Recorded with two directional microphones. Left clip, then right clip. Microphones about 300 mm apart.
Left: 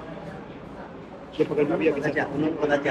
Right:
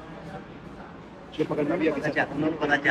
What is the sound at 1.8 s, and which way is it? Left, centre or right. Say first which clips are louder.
Speech: left 1 dB; centre.